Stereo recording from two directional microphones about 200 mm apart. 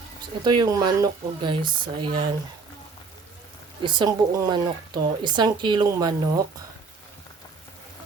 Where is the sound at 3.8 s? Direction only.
20° right (ahead or behind).